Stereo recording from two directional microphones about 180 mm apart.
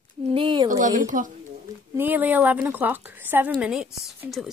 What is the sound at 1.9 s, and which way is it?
Speech, 10° right (ahead or behind).